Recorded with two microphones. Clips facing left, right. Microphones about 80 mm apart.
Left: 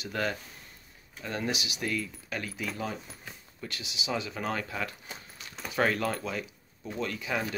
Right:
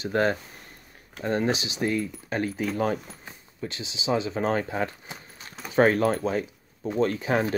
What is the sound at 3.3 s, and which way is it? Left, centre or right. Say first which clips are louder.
Speech: right 8 dB; right.